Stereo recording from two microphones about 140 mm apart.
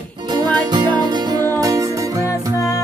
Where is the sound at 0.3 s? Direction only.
30° right (ahead or behind).